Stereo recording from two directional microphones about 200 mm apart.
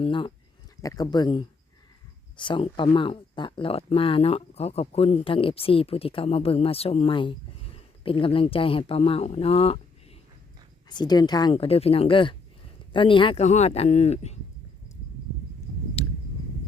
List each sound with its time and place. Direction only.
0.0 s speech: 25° left (ahead or behind)
10.8 s speech: 20° left (ahead or behind)
16.0 s a sound: 30° left (ahead or behind)